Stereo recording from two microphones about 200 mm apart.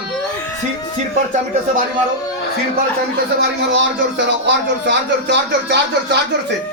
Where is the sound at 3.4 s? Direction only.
65° right (ahead or behind).